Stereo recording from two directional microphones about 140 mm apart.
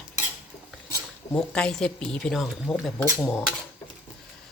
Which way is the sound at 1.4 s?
5° left (ahead or behind).